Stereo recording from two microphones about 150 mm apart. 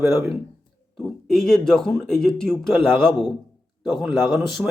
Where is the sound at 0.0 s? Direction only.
20° right (ahead or behind).